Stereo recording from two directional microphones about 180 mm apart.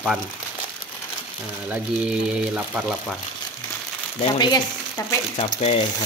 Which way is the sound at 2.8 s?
Centre (ahead or behind).